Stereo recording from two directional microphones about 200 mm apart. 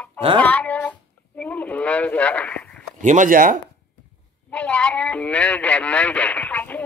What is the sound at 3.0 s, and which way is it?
Speech, 40° right (ahead or behind).